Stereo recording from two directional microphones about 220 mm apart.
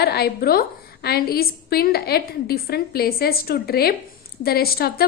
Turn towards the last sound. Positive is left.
turn(degrees=45)  # may be behind; listen again after turning